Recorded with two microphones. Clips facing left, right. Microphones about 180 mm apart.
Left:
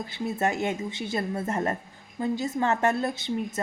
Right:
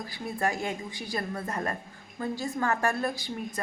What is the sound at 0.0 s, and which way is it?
A woman's voice, 25° left (ahead or behind).